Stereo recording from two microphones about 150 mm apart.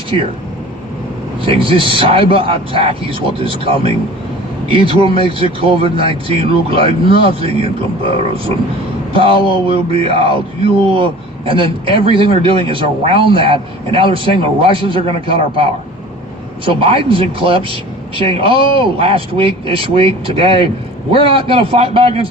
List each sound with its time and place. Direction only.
1.5 s speech: 35° right (ahead or behind)
16.8 s speech: 35° right (ahead or behind)